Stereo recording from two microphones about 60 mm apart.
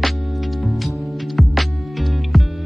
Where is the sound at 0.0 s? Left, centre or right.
Centre.